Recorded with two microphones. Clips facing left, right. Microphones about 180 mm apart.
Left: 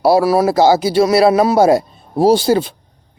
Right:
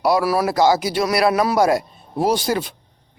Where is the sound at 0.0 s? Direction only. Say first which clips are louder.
Left 6 dB; 30° left (ahead or behind).